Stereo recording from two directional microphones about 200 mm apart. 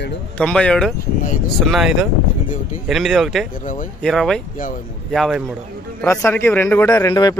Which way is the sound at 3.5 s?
40° left (ahead or behind).